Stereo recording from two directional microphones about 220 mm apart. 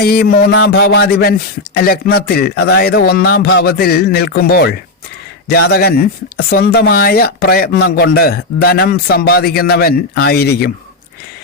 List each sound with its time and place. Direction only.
0.0 s speech: 45° left (ahead or behind)